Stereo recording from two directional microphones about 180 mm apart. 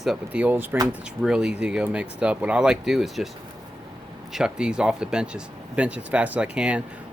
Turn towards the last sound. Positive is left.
turn(degrees=-5)  # may be behind; listen again after turning